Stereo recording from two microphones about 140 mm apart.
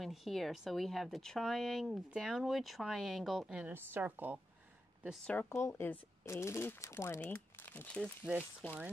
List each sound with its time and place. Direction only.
0.0 s speech: centre (ahead or behind)
5.2 s speech: 10° left (ahead or behind)